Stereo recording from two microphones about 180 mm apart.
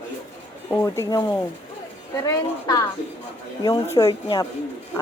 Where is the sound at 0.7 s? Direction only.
15° left (ahead or behind).